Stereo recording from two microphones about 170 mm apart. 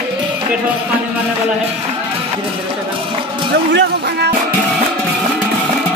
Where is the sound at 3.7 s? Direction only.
75° right (ahead or behind).